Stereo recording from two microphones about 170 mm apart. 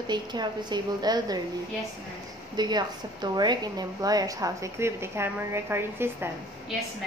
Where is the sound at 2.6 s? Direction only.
25° right (ahead or behind).